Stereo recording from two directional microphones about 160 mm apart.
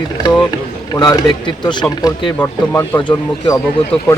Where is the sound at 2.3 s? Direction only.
15° left (ahead or behind).